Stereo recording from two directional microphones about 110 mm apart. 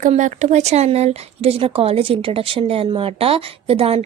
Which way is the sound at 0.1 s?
85° right.